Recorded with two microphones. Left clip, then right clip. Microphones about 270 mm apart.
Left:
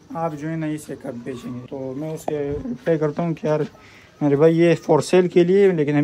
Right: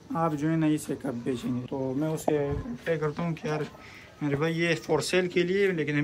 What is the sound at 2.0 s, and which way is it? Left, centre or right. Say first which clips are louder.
Speech: left 1 dB; right.